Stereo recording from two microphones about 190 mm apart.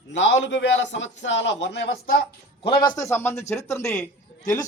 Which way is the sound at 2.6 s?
25° left (ahead or behind).